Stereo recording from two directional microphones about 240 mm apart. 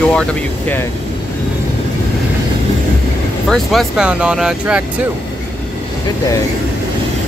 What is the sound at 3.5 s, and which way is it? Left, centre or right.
Speech, centre.